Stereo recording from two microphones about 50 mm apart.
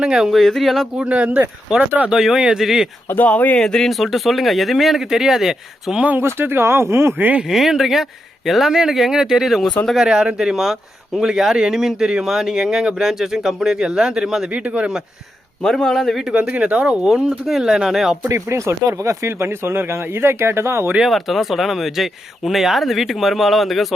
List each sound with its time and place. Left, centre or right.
0.0 s speech: centre
0.3 s speech: centre
0.9 s a man's voice: right
1.7 s speech: centre
3.2 s speech: left
3.6 s a man's voice: centre
3.9 s speech: centre
6.1 s speech: right
7.4 s speech: centre
14.5 s a man's voice: right
15.6 s a man's voice: centre
16.3 s speech: right
18.3 s speech: right
21.1 s speech: centre